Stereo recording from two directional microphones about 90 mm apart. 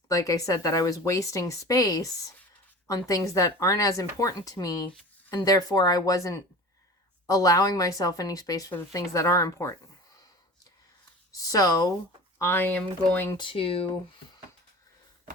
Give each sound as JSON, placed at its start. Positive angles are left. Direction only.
{"t": 0.1, "sound": "a woman's voice", "side_deg": 40}
{"t": 11.4, "sound": "a woman's voice", "side_deg": 40}
{"t": 12.4, "sound": "speech", "side_deg": 25}
{"t": 13.3, "sound": "speech", "side_deg": 70}